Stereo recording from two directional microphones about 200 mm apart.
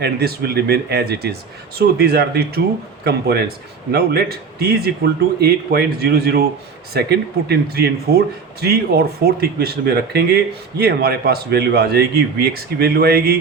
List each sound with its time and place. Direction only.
0.0 s speech: 55° right (ahead or behind)